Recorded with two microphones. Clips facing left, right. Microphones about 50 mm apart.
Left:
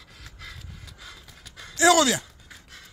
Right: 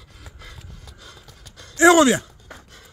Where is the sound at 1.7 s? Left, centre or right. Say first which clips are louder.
Right 5 dB; right.